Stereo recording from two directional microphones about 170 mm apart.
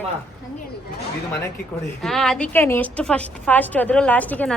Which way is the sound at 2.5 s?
15° left (ahead or behind).